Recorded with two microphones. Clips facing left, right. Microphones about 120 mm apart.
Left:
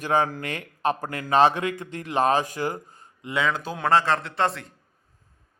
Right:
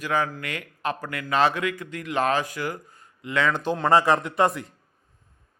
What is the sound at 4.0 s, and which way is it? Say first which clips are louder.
Speech: right 3 dB; 15° right (ahead or behind).